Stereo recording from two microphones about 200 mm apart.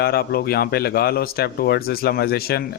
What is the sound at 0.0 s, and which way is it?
Speech, 50° left (ahead or behind).